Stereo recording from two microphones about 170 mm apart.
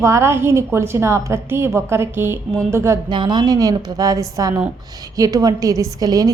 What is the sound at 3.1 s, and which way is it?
A woman's voice, 25° right (ahead or behind).